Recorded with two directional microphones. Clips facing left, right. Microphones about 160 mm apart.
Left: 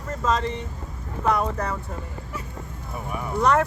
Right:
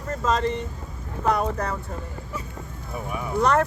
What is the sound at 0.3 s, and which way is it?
Speech, 45° right (ahead or behind).